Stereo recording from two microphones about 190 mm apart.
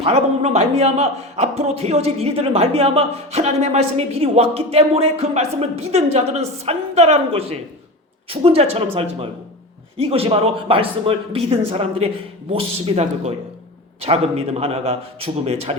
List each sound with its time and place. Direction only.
0.0 s a man's voice: 35° right (ahead or behind)
10.0 s a man's voice: 30° right (ahead or behind)